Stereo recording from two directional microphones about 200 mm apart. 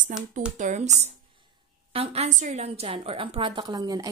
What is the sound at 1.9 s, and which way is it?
A woman's voice, 30° right (ahead or behind).